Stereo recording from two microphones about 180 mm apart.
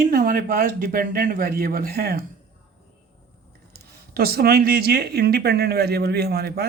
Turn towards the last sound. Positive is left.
turn(degrees=-60)  # may be behind; listen again after turning